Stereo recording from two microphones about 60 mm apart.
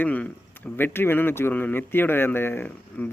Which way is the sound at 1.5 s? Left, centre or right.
Left.